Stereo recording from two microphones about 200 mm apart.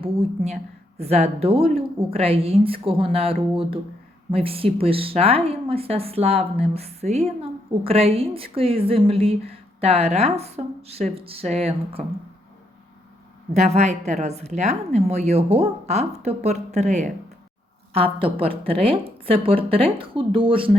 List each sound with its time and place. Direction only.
0.0 s a woman's voice: 30° right (ahead or behind)
13.6 s a woman's voice: 35° right (ahead or behind)